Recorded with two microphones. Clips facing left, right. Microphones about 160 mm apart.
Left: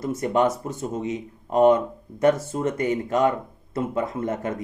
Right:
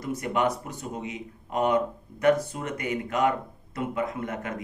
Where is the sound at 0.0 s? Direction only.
25° left (ahead or behind).